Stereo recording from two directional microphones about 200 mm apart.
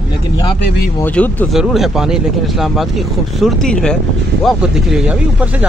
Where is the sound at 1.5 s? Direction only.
Centre (ahead or behind).